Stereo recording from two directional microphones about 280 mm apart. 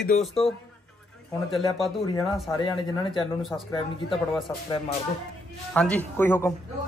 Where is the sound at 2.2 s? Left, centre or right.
Centre.